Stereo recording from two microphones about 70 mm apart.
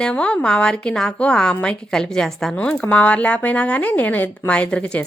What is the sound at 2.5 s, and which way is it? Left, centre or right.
A woman's voice, centre.